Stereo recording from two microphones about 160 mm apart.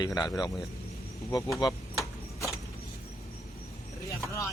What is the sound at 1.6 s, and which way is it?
Speech, 25° left (ahead or behind).